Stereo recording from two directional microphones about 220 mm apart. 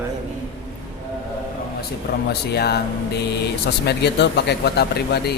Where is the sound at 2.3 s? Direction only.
45° left (ahead or behind).